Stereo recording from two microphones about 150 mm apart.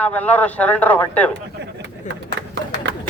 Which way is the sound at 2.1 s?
55° left (ahead or behind).